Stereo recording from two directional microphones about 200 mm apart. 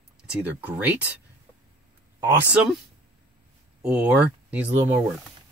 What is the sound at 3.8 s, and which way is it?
Speech, 5° right (ahead or behind).